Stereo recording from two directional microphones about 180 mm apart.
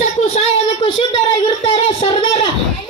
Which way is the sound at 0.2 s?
35° left (ahead or behind).